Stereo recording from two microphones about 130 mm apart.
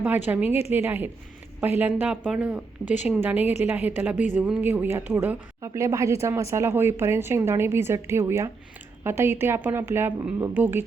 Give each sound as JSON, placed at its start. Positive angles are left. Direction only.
{"t": 0.0, "sound": "a woman's voice", "side_deg": -10}